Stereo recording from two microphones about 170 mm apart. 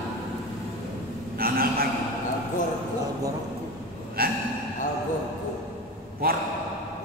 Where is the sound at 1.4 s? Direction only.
60° right (ahead or behind).